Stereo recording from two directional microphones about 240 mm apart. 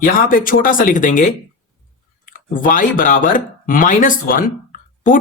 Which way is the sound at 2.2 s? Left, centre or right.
Left.